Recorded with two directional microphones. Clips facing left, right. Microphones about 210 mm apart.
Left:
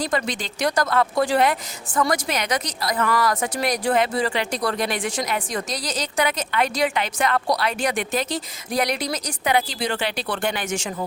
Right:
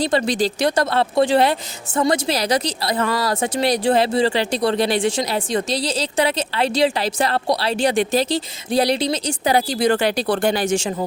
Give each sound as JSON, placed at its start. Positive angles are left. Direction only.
{"t": 0.0, "sound": "a woman's voice", "side_deg": -30}